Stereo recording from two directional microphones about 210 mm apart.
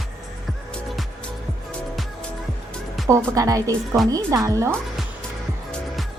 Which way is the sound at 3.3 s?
15° right (ahead or behind).